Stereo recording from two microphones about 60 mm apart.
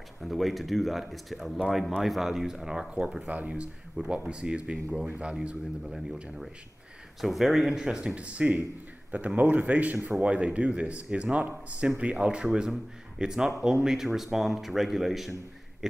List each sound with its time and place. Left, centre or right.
0.2 s speech: centre
3.3 s speech: right
7.2 s speech: centre; by 9.9 s right
9.9 s speech: centre
10.2 s speech: right; by 15.3 s centre
15.8 s a sound: centre